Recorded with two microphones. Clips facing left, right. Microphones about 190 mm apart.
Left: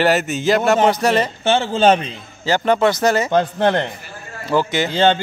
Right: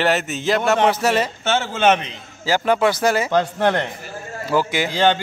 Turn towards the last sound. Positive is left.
turn(degrees=25)  # may be behind; listen again after turning